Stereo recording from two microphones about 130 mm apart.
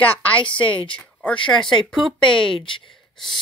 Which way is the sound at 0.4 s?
40° left (ahead or behind).